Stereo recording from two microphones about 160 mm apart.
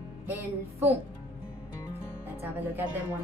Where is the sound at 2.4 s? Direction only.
10° right (ahead or behind).